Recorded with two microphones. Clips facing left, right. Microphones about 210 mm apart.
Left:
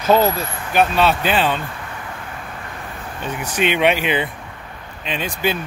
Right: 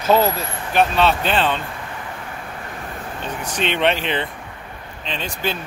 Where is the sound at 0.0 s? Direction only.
Centre (ahead or behind).